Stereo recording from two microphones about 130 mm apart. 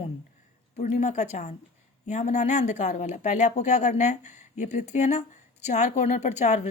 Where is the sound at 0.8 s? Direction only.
65° left (ahead or behind).